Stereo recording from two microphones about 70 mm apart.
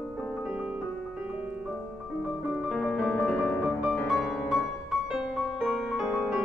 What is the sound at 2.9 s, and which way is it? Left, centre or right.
Piano, centre.